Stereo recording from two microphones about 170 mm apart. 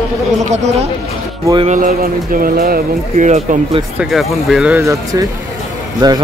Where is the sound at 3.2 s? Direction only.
40° right (ahead or behind).